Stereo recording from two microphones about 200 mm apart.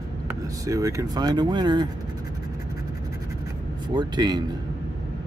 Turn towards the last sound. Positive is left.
turn(degrees=-20)  # may be behind; listen again after turning